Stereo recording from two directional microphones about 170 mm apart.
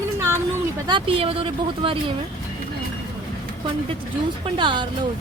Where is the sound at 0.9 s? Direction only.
30° right (ahead or behind).